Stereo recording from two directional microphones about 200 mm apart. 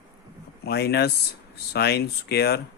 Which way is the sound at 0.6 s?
55° left (ahead or behind).